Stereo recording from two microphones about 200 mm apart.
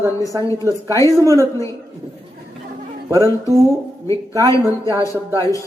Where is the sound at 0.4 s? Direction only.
15° left (ahead or behind).